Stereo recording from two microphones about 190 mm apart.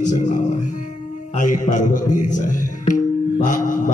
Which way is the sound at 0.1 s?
40° left (ahead or behind).